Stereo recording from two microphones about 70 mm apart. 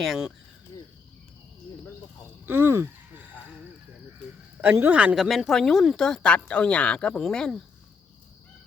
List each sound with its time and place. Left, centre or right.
2.5 s speech: right
4.6 s a man's voice: right
5.1 s speech: centre
7.1 s speech: centre